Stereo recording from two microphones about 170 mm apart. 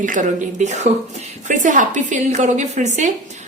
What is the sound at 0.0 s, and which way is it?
A woman's voice, 50° right (ahead or behind).